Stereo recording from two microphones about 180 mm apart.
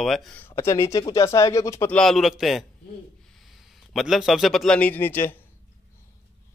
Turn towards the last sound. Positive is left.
turn(degrees=10)  # may be behind; listen again after turning